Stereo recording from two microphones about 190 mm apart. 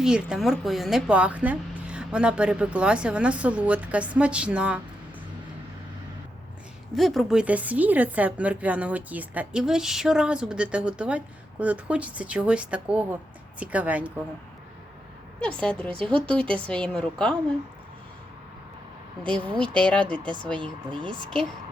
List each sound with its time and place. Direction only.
0.0 s speech: 5° right (ahead or behind)
6.9 s speech: centre (ahead or behind)
15.4 s speech: 5° left (ahead or behind)
19.2 s speech: 5° left (ahead or behind)
20.6 s speech: 25° right (ahead or behind)